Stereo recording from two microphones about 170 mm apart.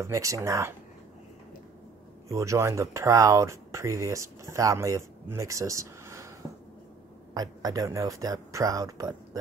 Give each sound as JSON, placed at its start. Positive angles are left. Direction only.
{"t": 0.0, "sound": "speech", "side_deg": -20}
{"t": 2.2, "sound": "speech", "side_deg": -20}
{"t": 7.3, "sound": "speech", "side_deg": -20}